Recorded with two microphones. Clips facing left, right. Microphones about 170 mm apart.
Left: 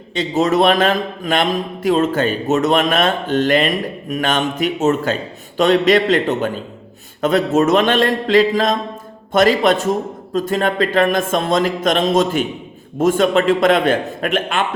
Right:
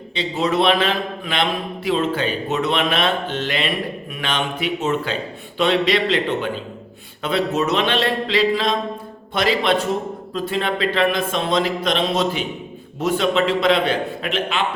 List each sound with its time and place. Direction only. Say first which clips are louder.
0.1 s a man's voice: left 5 dB; 45° left (ahead or behind)